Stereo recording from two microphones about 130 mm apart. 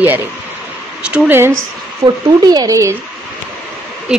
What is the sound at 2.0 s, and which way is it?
Speech, 35° right (ahead or behind).